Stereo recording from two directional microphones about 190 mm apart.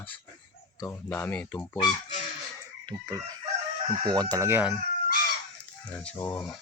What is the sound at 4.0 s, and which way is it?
Chicken, 20° right (ahead or behind).